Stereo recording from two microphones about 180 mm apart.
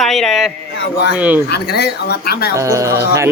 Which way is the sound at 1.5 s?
65° left (ahead or behind).